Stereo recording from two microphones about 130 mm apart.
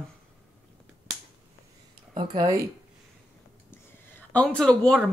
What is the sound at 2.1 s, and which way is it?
Speech, 40° right (ahead or behind).